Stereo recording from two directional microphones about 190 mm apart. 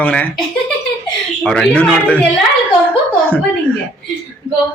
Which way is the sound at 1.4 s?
5° left (ahead or behind).